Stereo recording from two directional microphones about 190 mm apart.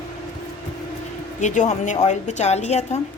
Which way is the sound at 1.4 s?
40° left (ahead or behind).